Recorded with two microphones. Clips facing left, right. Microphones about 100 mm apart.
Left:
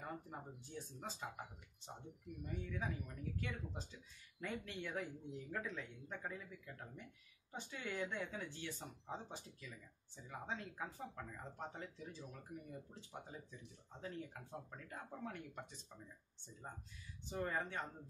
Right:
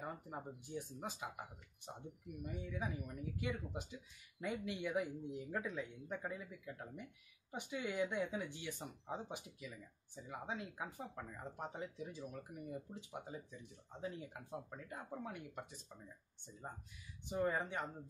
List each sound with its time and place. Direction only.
0.0 s speech: 15° right (ahead or behind)
17.3 s speech: 15° right (ahead or behind)